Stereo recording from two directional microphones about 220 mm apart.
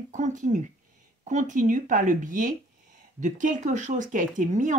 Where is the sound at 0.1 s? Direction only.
35° right (ahead or behind).